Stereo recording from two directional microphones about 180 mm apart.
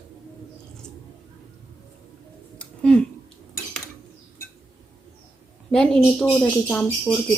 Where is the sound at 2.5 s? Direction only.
5° left (ahead or behind).